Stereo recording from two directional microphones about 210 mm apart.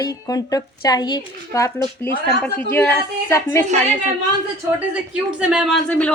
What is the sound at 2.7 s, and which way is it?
Speech, 10° left (ahead or behind).